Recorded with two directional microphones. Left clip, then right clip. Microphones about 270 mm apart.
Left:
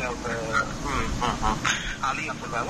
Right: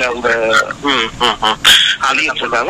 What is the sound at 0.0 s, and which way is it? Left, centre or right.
Speech, right.